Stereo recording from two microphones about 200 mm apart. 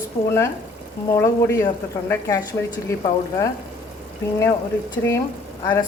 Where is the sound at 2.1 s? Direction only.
15° left (ahead or behind).